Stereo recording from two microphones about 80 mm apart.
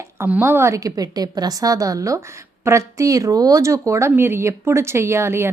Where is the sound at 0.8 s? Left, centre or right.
Right.